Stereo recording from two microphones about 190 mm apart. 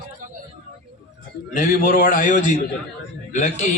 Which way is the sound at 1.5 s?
45° left (ahead or behind).